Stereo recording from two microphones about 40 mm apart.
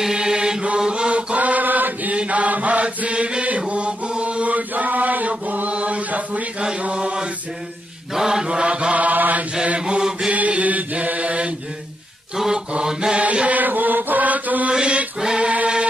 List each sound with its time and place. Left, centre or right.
0.0 s mantra: centre
1.3 s chant: right
2.1 s mantra: right
3.4 s chant: right
5.7 s chant: right
8.1 s chant: centre
8.9 s mantra: right
9.8 s mantra: right
10.3 s mantra: right
13.1 s mantra: right
13.6 s mantra: right
14.7 s mantra: right
15.1 s choir: centre